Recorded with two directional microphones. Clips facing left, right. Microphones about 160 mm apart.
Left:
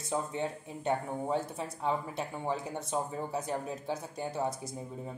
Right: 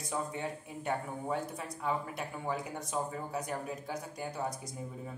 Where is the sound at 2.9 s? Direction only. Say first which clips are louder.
Left 2 dB; 30° left (ahead or behind).